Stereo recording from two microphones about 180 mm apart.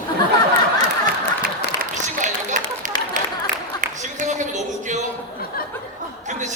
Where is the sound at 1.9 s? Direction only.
45° right (ahead or behind).